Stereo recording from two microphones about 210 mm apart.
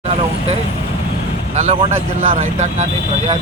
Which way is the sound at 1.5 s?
35° right (ahead or behind).